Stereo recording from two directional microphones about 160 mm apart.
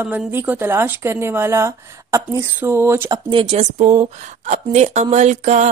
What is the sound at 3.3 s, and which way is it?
Speech, 40° right (ahead or behind).